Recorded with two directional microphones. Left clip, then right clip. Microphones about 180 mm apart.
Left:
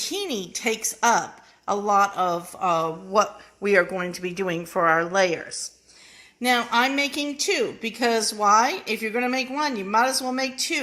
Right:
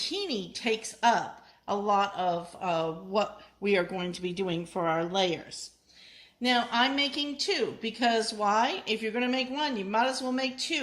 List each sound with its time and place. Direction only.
0.0 s a woman's voice: 15° left (ahead or behind)
3.6 s speech: centre (ahead or behind)
6.4 s a woman's voice: 20° left (ahead or behind)